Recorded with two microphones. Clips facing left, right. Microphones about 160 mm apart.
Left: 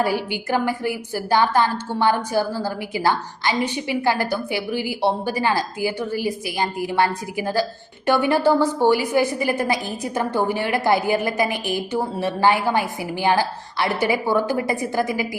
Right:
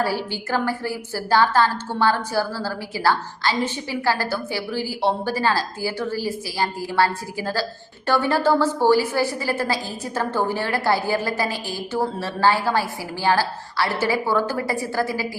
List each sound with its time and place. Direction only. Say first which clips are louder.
0.0 s a woman's voice: left 2 dB; 15° left (ahead or behind)